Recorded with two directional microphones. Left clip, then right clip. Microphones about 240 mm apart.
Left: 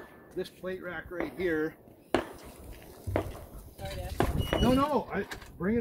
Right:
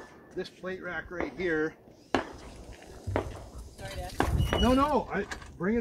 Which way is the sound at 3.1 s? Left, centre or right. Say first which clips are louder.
Even; left.